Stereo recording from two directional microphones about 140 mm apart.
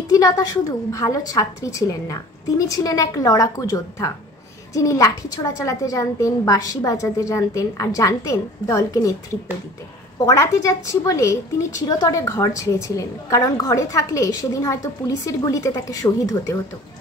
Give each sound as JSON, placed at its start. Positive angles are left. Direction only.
{"t": 0.1, "sound": "a woman's voice", "side_deg": 25}
{"t": 10.2, "sound": "a woman's voice", "side_deg": 25}